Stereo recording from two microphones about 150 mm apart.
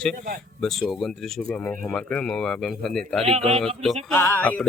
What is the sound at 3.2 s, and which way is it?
Speech, 45° right (ahead or behind).